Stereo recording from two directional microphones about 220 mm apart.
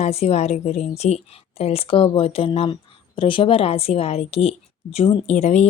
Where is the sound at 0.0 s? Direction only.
30° left (ahead or behind).